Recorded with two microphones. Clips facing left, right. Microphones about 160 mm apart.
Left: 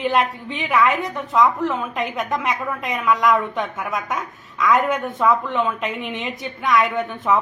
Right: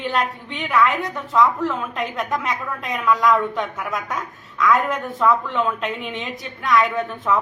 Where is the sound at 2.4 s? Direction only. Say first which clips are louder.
Left 2 dB; centre (ahead or behind).